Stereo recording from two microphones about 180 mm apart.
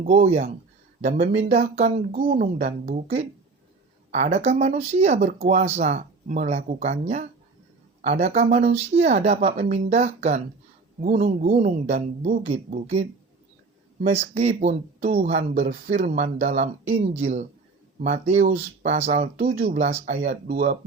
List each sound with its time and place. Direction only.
0.1 s speech: 35° right (ahead or behind)
1.0 s speech: 45° right (ahead or behind)
2.1 s speech: 55° right (ahead or behind)
14.1 s speech: 35° right (ahead or behind)
15.7 s speech: 55° right (ahead or behind); by 19.3 s 40° right (ahead or behind)
19.4 s speech: 60° right (ahead or behind)
19.7 s speech: 40° right (ahead or behind)